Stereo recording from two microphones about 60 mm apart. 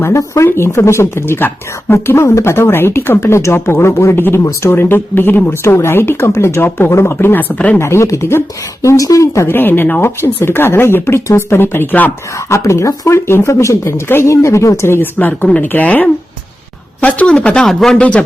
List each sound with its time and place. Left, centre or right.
0.4 s speech: left
5.6 s speech: left
6.7 s speech: left
7.8 s speech: left
9.5 s speech: left
12.5 s speech: left
14.3 s speech: left
14.8 s speech: left; by 18.2 s centre